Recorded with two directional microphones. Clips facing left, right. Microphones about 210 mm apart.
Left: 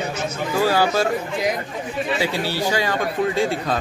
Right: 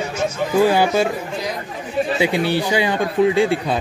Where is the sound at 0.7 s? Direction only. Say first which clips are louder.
Right 3 dB; 15° right (ahead or behind).